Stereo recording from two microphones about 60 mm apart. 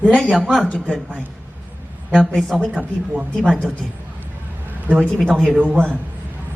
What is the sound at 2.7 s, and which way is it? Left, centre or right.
Speech, right.